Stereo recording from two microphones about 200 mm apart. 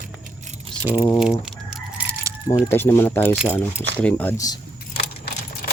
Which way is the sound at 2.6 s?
10° left (ahead or behind).